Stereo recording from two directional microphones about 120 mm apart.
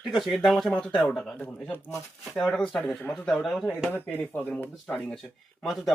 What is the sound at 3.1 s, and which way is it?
Speech, 5° left (ahead or behind).